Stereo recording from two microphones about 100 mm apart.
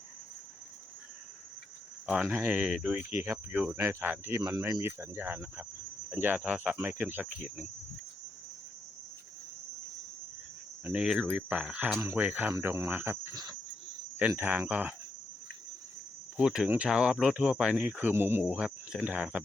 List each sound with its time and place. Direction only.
2.2 s speech: 20° right (ahead or behind)
2.6 s speech: 5° right (ahead or behind)
3.1 s speech: 25° right (ahead or behind)
3.5 s speech: 15° right (ahead or behind)
3.8 s speech: 30° right (ahead or behind)
4.8 s speech: 25° right (ahead or behind)
11.0 s speech: 5° right (ahead or behind); by 13.3 s 20° right (ahead or behind)
13.3 s cricket: 40° right (ahead or behind)
14.2 s speech: 20° right (ahead or behind)
16.4 s speech: 5° right (ahead or behind)
18.5 s speech: 10° right (ahead or behind)